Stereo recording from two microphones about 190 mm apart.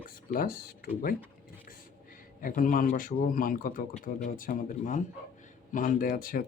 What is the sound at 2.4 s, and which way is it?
A man's voice, 45° left (ahead or behind).